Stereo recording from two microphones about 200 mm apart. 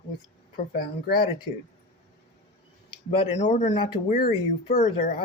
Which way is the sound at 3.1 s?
25° left (ahead or behind).